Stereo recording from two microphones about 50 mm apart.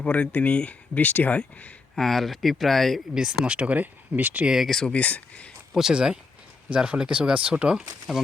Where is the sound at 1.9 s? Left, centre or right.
Centre.